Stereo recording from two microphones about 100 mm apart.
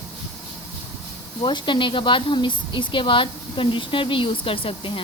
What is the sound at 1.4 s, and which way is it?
Speech, 50° left (ahead or behind).